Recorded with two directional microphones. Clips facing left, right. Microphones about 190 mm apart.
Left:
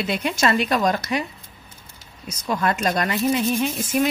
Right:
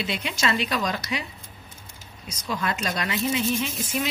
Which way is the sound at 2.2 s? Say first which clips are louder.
Left 6 dB; 50° left (ahead or behind).